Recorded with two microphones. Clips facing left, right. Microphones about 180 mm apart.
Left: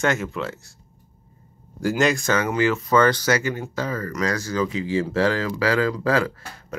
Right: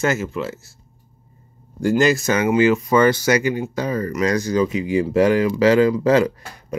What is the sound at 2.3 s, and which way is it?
Speech, 20° right (ahead or behind).